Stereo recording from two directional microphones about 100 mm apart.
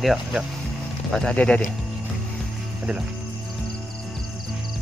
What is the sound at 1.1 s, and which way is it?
Speech, 10° left (ahead or behind).